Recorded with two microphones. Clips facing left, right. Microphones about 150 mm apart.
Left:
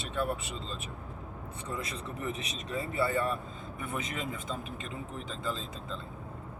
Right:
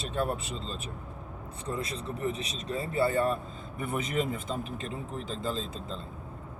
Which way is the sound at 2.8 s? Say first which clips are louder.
Right 3 dB; 35° right (ahead or behind).